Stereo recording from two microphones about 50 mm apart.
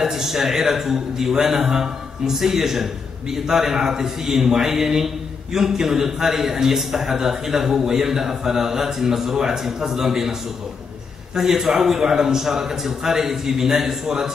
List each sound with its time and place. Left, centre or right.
0.0 s a man's voice: centre
11.3 s a man's voice: centre